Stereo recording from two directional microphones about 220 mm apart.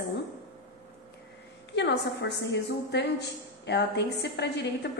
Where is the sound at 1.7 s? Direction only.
50° left (ahead or behind).